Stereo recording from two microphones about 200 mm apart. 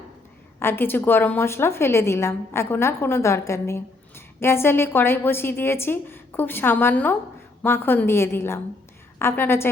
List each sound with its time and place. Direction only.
0.6 s a woman's voice: 10° left (ahead or behind)